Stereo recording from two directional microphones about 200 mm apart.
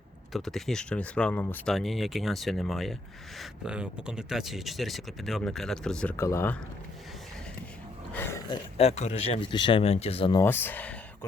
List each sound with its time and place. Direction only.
0.3 s speech: centre (ahead or behind)
8.1 s a sound: 10° left (ahead or behind)
8.4 s speech: 30° left (ahead or behind)
10.4 s speech: 10° left (ahead or behind)